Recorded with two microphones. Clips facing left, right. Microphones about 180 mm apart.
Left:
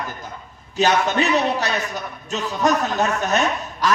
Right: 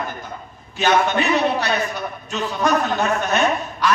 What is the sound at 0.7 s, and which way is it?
A man's voice, 40° left (ahead or behind).